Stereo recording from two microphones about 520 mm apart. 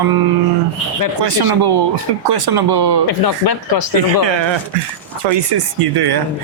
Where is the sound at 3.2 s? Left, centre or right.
Left.